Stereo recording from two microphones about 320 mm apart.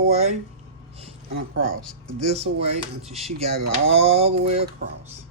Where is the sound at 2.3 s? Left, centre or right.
Centre.